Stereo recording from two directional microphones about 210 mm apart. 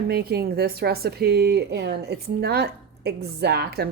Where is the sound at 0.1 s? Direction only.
50° right (ahead or behind).